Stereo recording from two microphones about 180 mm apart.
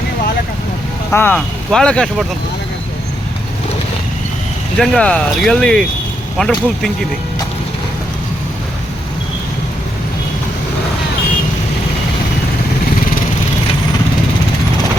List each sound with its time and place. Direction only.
1.1 s speech: 10° left (ahead or behind)
4.8 s speech: 5° left (ahead or behind)